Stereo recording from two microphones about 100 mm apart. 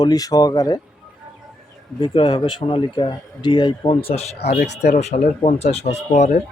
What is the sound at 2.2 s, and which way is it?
Speech, 45° left (ahead or behind).